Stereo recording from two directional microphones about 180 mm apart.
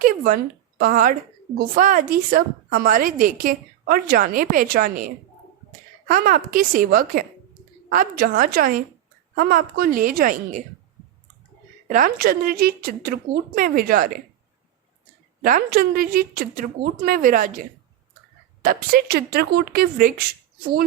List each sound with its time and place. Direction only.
0.8 s a woman's voice: 50° right (ahead or behind)
11.9 s a woman's voice: 50° right (ahead or behind)
15.4 s a woman's voice: 50° right (ahead or behind)